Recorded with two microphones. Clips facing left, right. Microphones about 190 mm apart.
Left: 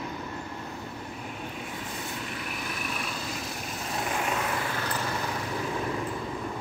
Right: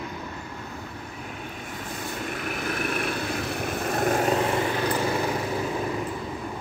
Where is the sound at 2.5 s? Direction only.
55° right (ahead or behind); by 4.8 s 25° right (ahead or behind).